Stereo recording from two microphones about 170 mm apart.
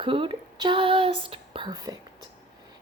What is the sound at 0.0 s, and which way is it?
A woman's voice, 30° right (ahead or behind).